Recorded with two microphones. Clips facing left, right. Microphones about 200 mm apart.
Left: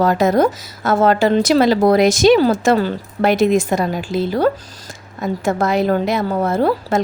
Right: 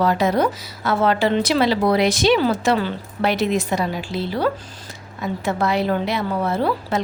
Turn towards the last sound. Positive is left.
turn(degrees=45)  # may be behind; listen again after turning